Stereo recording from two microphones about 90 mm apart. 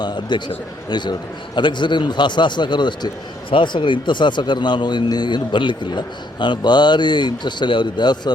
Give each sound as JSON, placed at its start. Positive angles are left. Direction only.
{"t": 0.0, "sound": "a man's voice", "side_deg": 55}